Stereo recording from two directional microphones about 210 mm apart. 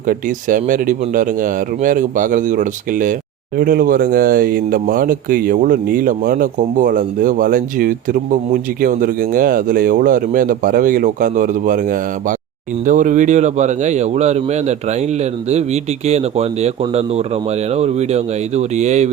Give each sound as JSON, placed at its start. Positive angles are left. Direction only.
{"t": 0.1, "sound": "speech", "side_deg": -40}